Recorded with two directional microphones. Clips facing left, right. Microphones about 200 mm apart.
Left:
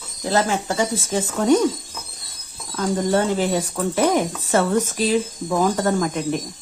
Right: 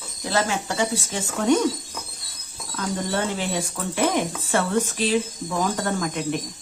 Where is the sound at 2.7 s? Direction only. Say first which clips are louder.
Left 6 dB; 45° left (ahead or behind).